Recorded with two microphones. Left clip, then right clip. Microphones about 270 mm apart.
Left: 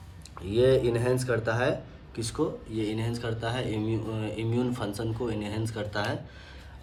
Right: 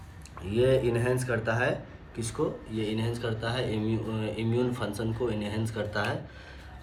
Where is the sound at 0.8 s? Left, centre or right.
Centre.